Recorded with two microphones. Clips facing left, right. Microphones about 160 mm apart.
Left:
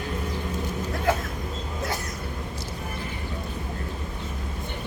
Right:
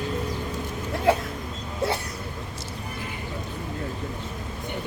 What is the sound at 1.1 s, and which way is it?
Speech, 30° right (ahead or behind).